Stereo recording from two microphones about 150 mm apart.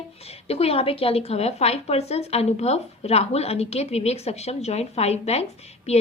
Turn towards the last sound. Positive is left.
turn(degrees=45)  # may be behind; listen again after turning